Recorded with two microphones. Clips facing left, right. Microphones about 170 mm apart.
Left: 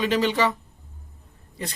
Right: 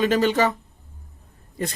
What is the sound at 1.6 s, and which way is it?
Speech, 50° right (ahead or behind).